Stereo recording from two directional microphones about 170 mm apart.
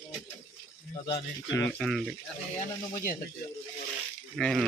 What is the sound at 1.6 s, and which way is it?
Speech, 10° left (ahead or behind).